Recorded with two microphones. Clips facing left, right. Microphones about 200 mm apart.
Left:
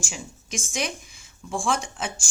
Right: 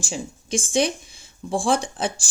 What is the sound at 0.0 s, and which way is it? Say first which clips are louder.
Speech: right 7 dB; 30° right (ahead or behind).